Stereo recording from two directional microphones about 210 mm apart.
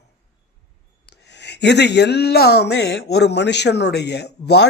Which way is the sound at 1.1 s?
55° left (ahead or behind).